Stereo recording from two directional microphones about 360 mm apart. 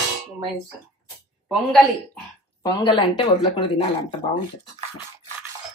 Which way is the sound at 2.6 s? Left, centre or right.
Centre.